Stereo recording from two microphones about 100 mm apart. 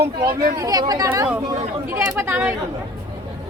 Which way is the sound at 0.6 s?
40° right (ahead or behind).